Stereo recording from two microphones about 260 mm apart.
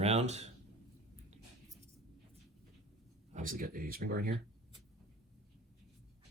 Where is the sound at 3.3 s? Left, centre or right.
Right.